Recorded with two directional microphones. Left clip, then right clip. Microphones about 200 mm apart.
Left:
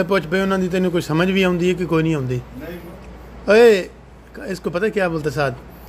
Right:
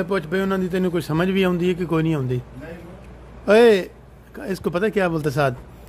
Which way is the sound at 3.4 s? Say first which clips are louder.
Left 2 dB; 15° right (ahead or behind).